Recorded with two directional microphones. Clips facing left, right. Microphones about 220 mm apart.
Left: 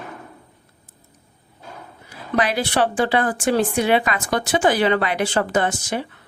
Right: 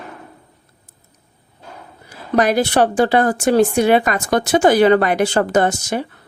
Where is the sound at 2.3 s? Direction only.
45° right (ahead or behind).